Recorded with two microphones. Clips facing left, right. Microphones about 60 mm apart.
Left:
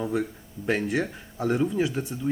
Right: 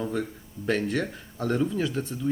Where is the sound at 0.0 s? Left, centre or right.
Centre.